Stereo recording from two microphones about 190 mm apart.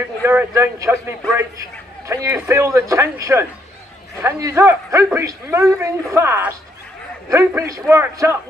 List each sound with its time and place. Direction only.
0.2 s a man's voice: 10° right (ahead or behind)